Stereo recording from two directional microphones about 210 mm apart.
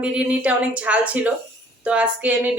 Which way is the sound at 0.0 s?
5° right (ahead or behind).